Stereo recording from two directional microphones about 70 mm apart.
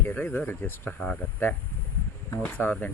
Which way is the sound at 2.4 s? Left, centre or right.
Left.